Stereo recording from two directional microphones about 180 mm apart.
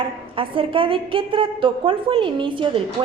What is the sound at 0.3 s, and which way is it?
A woman's voice, 30° right (ahead or behind).